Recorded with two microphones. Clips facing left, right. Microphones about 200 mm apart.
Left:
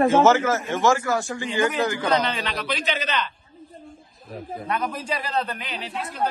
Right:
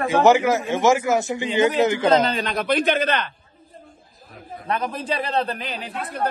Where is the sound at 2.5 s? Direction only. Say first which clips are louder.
Right 7 dB; 50° right (ahead or behind).